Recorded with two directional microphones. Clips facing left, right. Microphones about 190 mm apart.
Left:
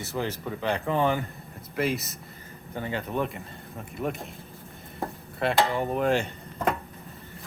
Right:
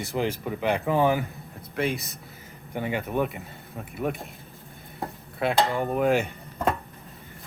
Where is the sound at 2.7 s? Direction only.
15° right (ahead or behind).